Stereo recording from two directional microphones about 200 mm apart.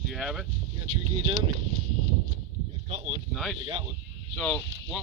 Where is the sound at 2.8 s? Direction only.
30° right (ahead or behind).